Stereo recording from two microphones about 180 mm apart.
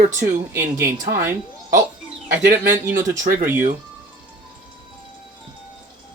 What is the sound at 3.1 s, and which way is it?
Speech, 45° right (ahead or behind).